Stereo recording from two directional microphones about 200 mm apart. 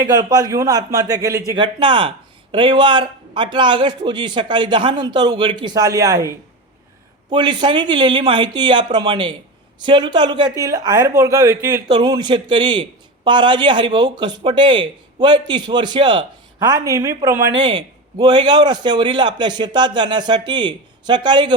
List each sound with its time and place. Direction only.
0.0 s a man's voice: 20° right (ahead or behind)